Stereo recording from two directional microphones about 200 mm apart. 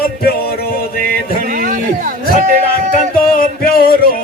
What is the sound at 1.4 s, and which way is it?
Music, 40° right (ahead or behind).